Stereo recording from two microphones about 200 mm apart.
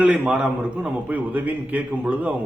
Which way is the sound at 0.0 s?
5° right (ahead or behind).